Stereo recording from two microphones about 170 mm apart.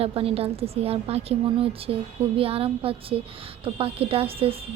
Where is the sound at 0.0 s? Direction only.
35° right (ahead or behind).